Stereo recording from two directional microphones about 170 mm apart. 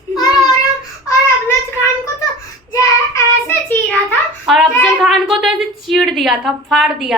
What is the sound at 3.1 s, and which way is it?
Child singing, 15° left (ahead or behind).